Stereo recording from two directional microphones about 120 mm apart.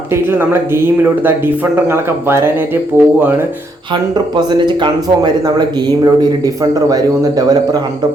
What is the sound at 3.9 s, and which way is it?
Speech, 35° right (ahead or behind).